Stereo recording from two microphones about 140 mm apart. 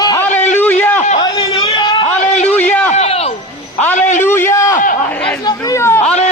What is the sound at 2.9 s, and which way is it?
Speech, 50° left (ahead or behind).